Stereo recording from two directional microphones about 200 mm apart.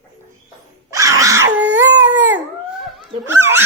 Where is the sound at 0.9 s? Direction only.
15° right (ahead or behind).